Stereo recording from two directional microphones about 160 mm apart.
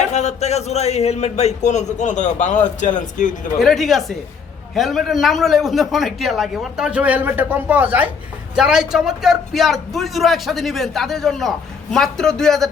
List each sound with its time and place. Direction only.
0.1 s a man's voice: 45° left (ahead or behind)
3.6 s a man's voice: centre (ahead or behind)